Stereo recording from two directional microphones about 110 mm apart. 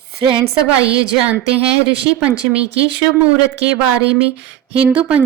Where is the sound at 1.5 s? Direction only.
60° right (ahead or behind).